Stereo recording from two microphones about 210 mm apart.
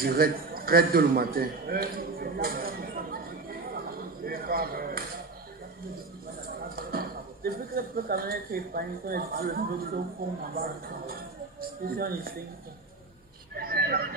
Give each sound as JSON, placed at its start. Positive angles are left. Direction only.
{"t": 0.0, "sound": "a man's voice", "side_deg": -45}
{"t": 3.7, "sound": "a sound", "side_deg": -45}
{"t": 6.4, "sound": "a man's voice", "side_deg": -45}
{"t": 13.6, "sound": "vehicle", "side_deg": -45}